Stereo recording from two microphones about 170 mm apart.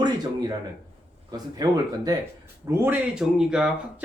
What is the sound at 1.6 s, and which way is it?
Speech, 20° right (ahead or behind).